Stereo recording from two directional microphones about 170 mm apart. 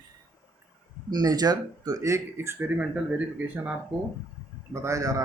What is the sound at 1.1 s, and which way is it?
Speech, 25° right (ahead or behind).